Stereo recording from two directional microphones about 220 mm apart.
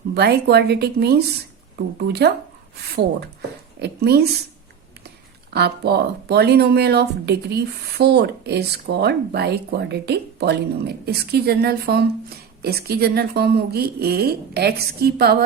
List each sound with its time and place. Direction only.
0.1 s speech: 45° right (ahead or behind)
3.8 s speech: 45° right (ahead or behind)
5.5 s speech: 50° right (ahead or behind)